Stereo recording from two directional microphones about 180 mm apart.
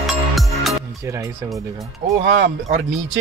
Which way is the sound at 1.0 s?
15° right (ahead or behind).